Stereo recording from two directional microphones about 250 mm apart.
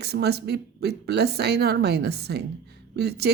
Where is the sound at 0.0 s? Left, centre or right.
Right.